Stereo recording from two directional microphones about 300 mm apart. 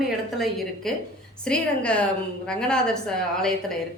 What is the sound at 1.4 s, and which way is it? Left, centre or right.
Speech, centre.